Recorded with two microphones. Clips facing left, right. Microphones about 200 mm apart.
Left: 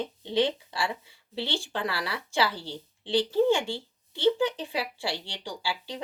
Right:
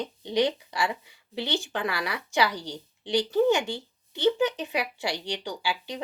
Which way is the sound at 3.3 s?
30° left (ahead or behind).